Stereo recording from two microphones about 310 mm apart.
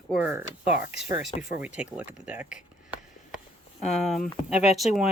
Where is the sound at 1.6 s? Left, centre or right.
Centre.